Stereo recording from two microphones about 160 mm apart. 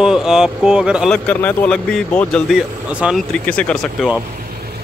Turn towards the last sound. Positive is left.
turn(degrees=5)  # may be behind; listen again after turning